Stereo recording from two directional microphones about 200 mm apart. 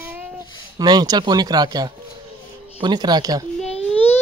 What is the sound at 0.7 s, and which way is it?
Speech, 20° right (ahead or behind).